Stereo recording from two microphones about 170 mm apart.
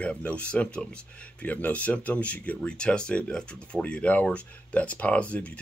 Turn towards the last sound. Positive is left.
turn(degrees=10)  # may be behind; listen again after turning